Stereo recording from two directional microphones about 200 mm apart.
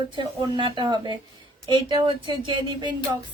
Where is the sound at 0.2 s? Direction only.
20° right (ahead or behind).